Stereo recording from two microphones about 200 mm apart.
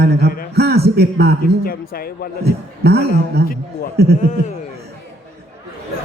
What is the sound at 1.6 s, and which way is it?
Speech, 45° left (ahead or behind).